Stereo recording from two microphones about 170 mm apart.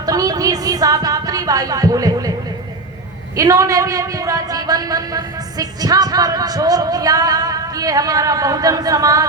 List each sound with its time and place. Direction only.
0.0 s music: 20° right (ahead or behind)
3.3 s a man's voice: 20° right (ahead or behind)